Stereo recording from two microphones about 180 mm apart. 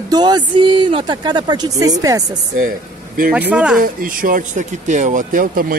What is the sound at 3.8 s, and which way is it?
Speech, 50° right (ahead or behind).